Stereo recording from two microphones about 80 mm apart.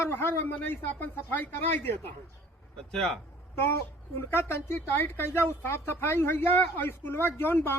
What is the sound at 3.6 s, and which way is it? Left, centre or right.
A man's voice, left.